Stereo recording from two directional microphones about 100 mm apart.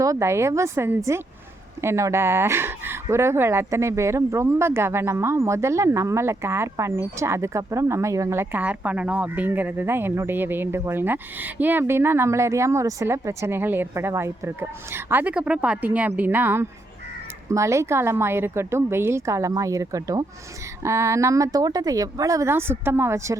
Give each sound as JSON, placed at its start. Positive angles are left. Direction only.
{"t": 0.0, "sound": "speech", "side_deg": -30}